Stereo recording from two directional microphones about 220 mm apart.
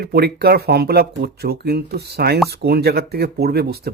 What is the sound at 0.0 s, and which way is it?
Speech, 45° right (ahead or behind).